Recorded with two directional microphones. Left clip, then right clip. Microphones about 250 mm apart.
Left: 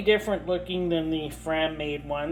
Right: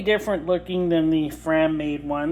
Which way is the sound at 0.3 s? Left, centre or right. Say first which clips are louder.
Right 4 dB; right.